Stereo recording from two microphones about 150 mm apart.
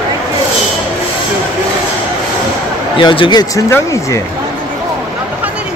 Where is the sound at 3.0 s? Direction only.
30° left (ahead or behind).